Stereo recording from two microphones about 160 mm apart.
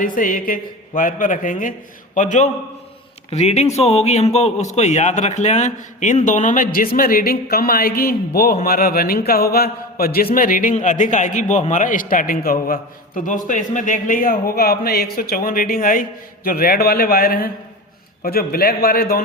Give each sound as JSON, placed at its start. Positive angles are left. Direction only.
{"t": 0.0, "sound": "a man's voice", "side_deg": 60}
{"t": 6.7, "sound": "speech", "side_deg": 65}
{"t": 10.3, "sound": "speech", "side_deg": 60}